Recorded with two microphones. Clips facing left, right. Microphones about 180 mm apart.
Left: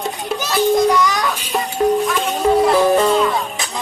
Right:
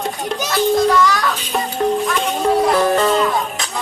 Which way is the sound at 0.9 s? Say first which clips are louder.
Right 1 dB; 15° left (ahead or behind).